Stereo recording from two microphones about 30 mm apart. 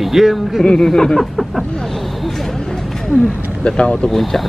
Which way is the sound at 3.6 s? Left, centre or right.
Left.